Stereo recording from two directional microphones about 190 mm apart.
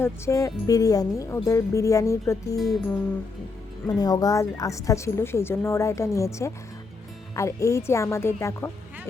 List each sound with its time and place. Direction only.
0.0 s a woman's voice: 15° left (ahead or behind)
3.8 s a woman's voice: 20° left (ahead or behind)